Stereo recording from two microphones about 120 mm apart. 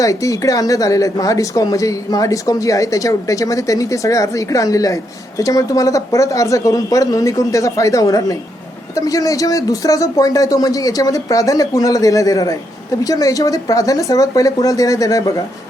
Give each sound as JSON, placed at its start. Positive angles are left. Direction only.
{"t": 0.0, "sound": "a woman's voice", "side_deg": 30}